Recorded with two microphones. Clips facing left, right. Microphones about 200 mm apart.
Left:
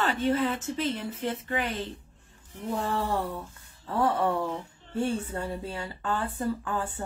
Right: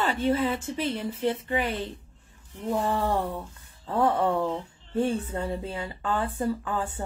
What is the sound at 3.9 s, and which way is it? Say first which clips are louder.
Speech: right 2 dB; 20° right (ahead or behind).